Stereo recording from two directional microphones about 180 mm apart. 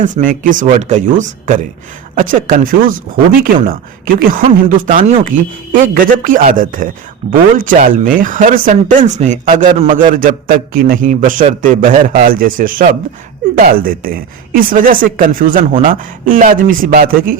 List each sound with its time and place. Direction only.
0.0 s a man's voice: 45° right (ahead or behind)
9.7 s a man's voice: 35° right (ahead or behind)
10.0 s a man's voice: 50° right (ahead or behind)